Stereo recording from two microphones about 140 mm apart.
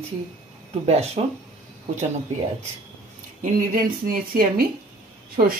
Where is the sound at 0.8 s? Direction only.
50° right (ahead or behind).